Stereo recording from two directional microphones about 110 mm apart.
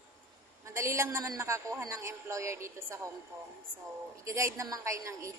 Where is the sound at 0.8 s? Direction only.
25° right (ahead or behind).